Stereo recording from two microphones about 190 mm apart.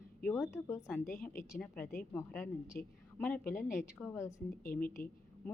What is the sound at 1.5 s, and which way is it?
A woman's voice, 5° left (ahead or behind).